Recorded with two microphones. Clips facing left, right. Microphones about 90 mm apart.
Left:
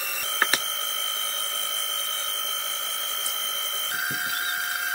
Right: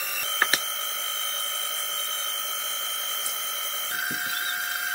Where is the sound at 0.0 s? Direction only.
Centre (ahead or behind).